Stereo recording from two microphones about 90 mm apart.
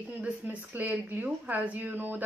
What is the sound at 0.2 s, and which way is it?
Speech, 15° right (ahead or behind).